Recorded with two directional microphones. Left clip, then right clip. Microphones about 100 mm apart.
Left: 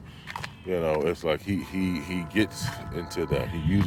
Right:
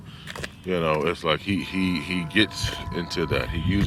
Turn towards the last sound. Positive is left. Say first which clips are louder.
# right 2 dB
turn(degrees=35)  # may be behind; listen again after turning